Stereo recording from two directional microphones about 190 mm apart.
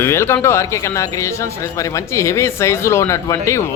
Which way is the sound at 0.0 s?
15° left (ahead or behind).